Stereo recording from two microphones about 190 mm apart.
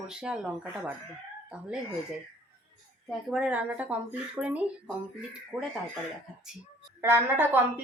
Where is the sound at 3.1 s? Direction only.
Centre (ahead or behind).